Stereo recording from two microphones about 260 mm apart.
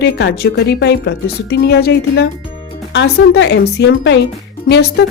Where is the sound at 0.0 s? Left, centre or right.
Left.